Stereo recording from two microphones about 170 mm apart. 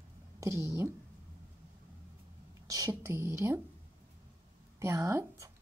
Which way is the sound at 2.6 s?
20° right (ahead or behind).